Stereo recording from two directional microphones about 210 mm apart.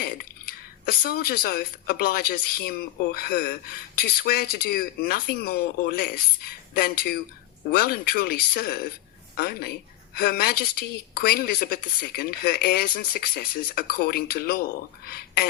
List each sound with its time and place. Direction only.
0.0 s a woman's voice: 45° left (ahead or behind)